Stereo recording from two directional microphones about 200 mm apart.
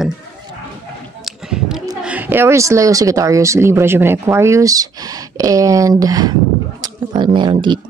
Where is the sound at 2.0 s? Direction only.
10° right (ahead or behind).